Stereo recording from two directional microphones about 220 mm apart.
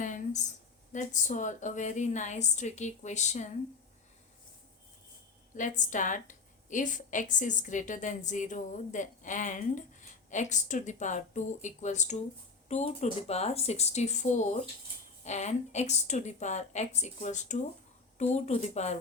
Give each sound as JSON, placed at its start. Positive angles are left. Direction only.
{"t": 0.0, "sound": "a sound", "side_deg": 35}
{"t": 0.9, "sound": "a woman's voice", "side_deg": 35}
{"t": 5.5, "sound": "a woman's voice", "side_deg": 35}